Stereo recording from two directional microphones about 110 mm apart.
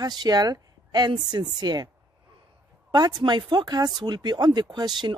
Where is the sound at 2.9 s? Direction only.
40° right (ahead or behind).